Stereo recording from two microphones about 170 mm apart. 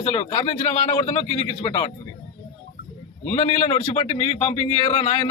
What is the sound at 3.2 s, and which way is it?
A man's voice, 35° left (ahead or behind).